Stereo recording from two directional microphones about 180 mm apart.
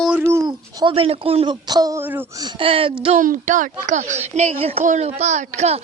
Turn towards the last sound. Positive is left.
turn(degrees=-40)  # may be behind; listen again after turning